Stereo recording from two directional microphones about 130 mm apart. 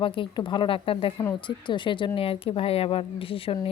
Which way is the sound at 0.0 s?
40° left (ahead or behind).